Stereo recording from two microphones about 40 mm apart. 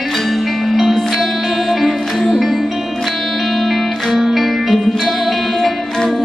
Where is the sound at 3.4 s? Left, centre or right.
Centre.